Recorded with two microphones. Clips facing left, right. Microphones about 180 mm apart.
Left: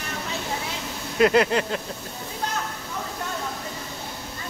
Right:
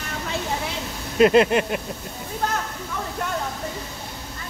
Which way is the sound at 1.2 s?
20° right (ahead or behind).